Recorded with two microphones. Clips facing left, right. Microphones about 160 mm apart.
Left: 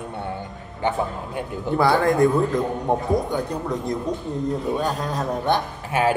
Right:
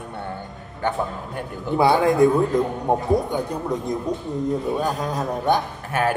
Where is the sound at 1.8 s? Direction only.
15° right (ahead or behind).